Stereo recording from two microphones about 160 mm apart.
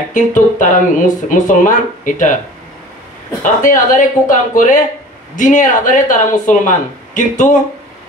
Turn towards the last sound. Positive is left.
turn(degrees=50)  # may be behind; listen again after turning